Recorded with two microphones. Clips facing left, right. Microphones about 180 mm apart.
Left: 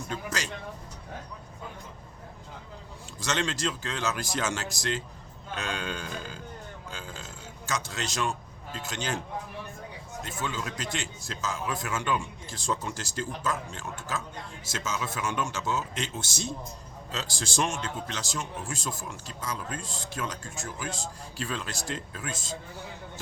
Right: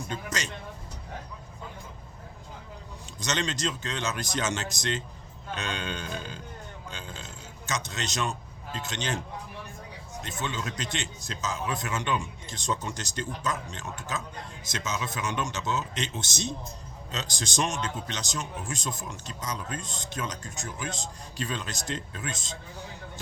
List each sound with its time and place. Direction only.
0.3 s speech: 20° right (ahead or behind)
3.2 s speech: 20° right (ahead or behind)
6.9 s a sound: 20° right (ahead or behind)
7.7 s speech: 20° right (ahead or behind)
10.2 s speech: 20° right (ahead or behind)